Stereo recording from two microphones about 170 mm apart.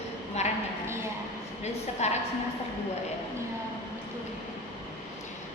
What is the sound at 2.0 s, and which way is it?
Speech, 40° left (ahead or behind).